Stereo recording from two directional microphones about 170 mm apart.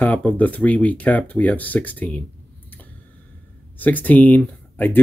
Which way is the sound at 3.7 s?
10° left (ahead or behind).